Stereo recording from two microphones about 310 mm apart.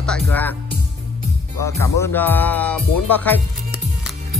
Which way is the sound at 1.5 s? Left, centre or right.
Centre.